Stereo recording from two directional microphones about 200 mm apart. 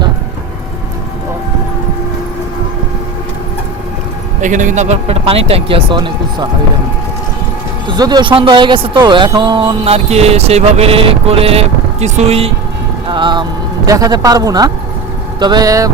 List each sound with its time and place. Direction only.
4.4 s speech: 40° right (ahead or behind)
7.9 s speech: 20° right (ahead or behind)